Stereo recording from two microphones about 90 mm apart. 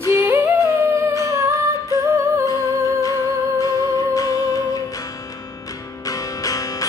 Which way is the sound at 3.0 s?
40° left (ahead or behind).